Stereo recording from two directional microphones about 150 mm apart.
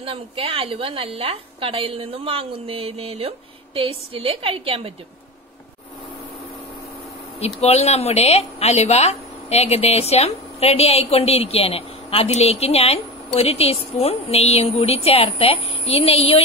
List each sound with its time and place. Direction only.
0.0 s a woman's voice: 40° right (ahead or behind)
7.3 s a woman's voice: 45° left (ahead or behind)